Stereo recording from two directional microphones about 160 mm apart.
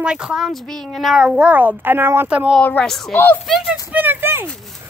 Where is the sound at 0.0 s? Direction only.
5° right (ahead or behind).